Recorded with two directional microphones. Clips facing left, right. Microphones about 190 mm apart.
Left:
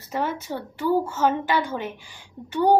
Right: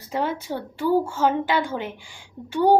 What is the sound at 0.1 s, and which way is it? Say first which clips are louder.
A woman's voice: right 1 dB; 15° right (ahead or behind).